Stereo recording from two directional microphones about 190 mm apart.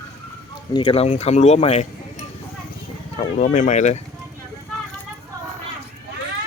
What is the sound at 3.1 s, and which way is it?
Speech, 35° left (ahead or behind).